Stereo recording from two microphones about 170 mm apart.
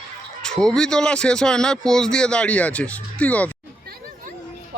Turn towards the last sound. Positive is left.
turn(degrees=-65)  # may be behind; listen again after turning